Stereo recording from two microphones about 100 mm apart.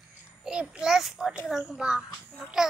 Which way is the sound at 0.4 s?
10° right (ahead or behind).